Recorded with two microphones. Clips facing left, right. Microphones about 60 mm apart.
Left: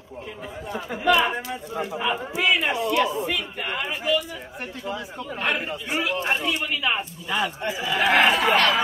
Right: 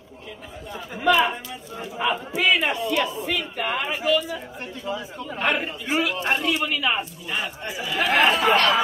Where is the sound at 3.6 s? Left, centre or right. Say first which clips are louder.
Right 3 dB; centre.